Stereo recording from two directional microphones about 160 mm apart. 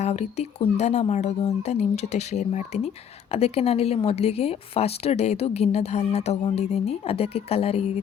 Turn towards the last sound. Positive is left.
turn(degrees=40)  # may be behind; listen again after turning